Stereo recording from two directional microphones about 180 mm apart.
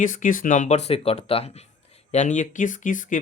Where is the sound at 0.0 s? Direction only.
45° left (ahead or behind).